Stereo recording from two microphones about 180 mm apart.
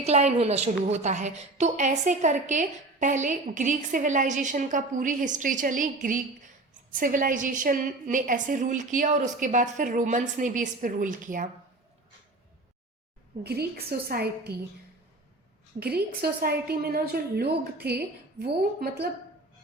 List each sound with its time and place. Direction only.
0.0 s a woman's voice: 40° right (ahead or behind)
13.4 s a woman's voice: 60° right (ahead or behind)
15.8 s a woman's voice: 60° right (ahead or behind)